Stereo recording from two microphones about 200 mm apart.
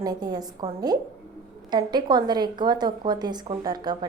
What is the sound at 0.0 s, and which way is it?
A woman's voice, 20° right (ahead or behind).